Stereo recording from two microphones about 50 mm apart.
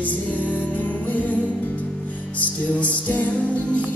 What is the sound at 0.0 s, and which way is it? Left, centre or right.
Music, left.